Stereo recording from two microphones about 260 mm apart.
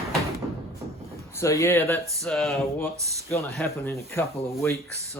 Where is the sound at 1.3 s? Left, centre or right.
Centre.